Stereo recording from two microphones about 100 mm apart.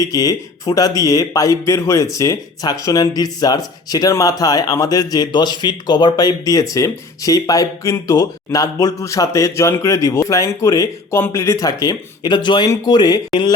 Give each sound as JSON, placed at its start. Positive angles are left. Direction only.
{"t": 0.0, "sound": "a man's voice", "side_deg": 35}